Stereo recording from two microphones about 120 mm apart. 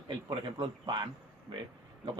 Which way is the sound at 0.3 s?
40° right (ahead or behind).